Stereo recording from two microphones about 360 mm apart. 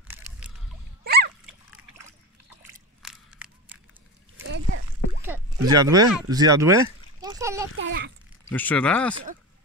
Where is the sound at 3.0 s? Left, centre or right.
Centre.